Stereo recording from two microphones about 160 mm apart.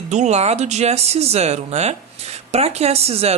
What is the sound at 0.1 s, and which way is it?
Speech, 45° right (ahead or behind).